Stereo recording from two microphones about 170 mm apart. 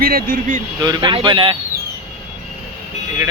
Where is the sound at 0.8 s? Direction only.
25° right (ahead or behind).